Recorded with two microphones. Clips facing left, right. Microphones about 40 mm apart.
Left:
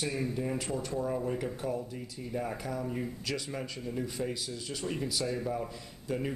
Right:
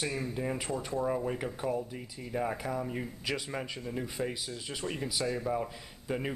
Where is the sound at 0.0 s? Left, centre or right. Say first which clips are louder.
Left 1 dB; centre.